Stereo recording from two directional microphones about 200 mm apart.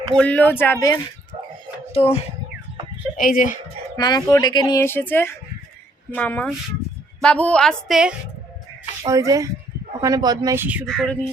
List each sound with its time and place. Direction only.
0.2 s speech: 10° left (ahead or behind)
1.9 s speech: 30° left (ahead or behind)
3.2 s speech: 45° left (ahead or behind)
3.9 s a woman's voice: 20° left (ahead or behind); by 8.1 s centre (ahead or behind)
9.0 s speech: 15° right (ahead or behind)
10.8 s a woman's voice: 5° left (ahead or behind)